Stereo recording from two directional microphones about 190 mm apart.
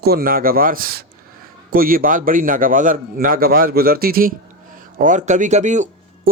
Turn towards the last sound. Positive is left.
turn(degrees=-40)  # may be behind; listen again after turning